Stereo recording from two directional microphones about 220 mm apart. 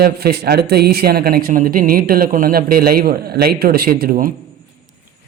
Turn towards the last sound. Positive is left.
turn(degrees=-40)  # may be behind; listen again after turning